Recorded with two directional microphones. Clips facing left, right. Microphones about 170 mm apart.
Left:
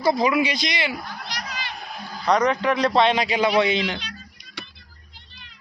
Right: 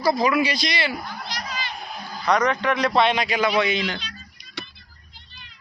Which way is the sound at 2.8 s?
30° left (ahead or behind).